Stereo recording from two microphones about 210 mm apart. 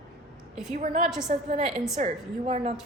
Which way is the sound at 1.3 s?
30° right (ahead or behind).